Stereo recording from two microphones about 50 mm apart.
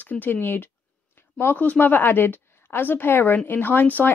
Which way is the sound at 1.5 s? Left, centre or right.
Left.